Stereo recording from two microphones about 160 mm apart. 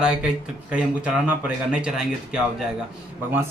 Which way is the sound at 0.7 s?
5° right (ahead or behind).